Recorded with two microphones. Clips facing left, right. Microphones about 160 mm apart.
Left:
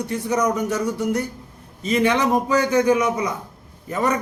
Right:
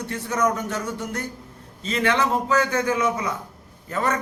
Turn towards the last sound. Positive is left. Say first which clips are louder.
# left 3 dB
turn(degrees=15)  # may be behind; listen again after turning